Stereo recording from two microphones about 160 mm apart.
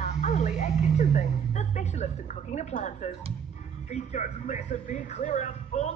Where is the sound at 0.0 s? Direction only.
45° left (ahead or behind).